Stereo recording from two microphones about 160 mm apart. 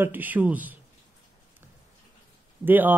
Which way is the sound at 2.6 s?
10° right (ahead or behind).